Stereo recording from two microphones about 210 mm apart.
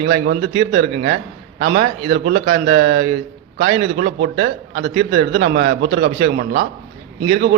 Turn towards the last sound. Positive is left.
turn(degrees=-55)  # may be behind; listen again after turning